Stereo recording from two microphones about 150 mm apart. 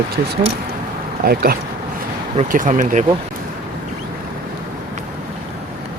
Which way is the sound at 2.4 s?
60° right (ahead or behind).